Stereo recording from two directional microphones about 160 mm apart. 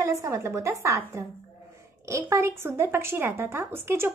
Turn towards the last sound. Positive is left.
turn(degrees=-15)  # may be behind; listen again after turning